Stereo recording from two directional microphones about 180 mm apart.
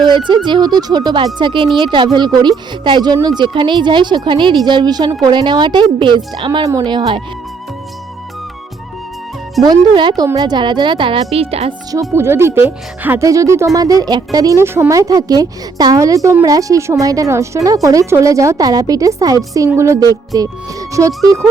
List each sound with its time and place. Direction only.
0.1 s a woman's voice: 25° right (ahead or behind)
9.6 s a woman's voice: 25° right (ahead or behind)
11.9 s a woman's voice: 15° right (ahead or behind)